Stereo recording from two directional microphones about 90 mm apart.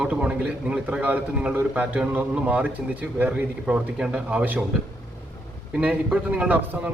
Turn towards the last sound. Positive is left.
turn(degrees=-20)  # may be behind; listen again after turning